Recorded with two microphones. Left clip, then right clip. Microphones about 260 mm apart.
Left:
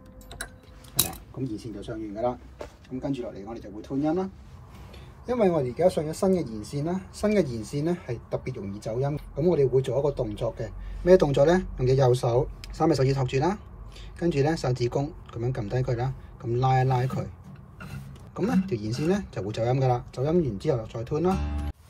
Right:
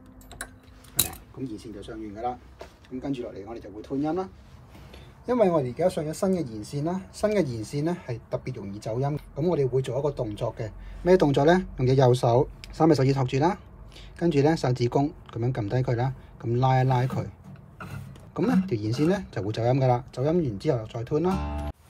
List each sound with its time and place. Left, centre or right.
2.1 s speech: centre
3.0 s speech: centre
5.2 s speech: centre
18.3 s speech: centre